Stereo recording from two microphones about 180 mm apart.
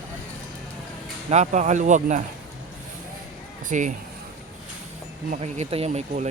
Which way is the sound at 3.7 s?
45° right (ahead or behind).